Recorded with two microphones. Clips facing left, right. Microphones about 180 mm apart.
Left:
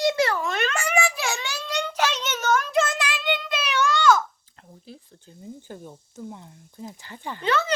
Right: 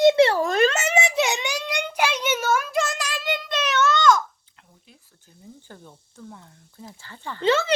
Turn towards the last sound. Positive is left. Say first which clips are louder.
# right 4 dB
turn(degrees=-25)  # may be behind; listen again after turning